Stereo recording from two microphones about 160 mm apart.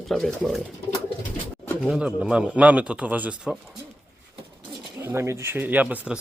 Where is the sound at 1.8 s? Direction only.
5° right (ahead or behind).